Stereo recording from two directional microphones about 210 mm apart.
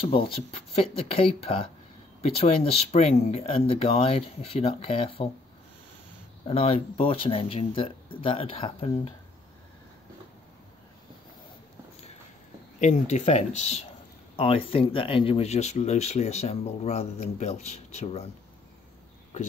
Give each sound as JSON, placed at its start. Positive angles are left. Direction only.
{"t": 0.0, "sound": "speech", "side_deg": 25}
{"t": 6.4, "sound": "speech", "side_deg": 25}
{"t": 12.8, "sound": "speech", "side_deg": 35}